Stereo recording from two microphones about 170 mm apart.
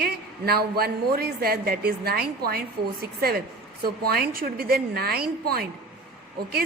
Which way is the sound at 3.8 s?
60° right (ahead or behind).